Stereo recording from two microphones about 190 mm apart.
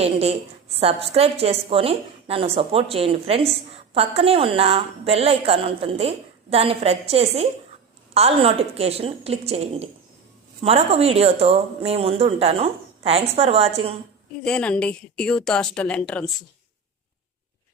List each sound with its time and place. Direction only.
0.0 s a woman's voice: 35° right (ahead or behind)
14.4 s a woman's voice: 5° left (ahead or behind)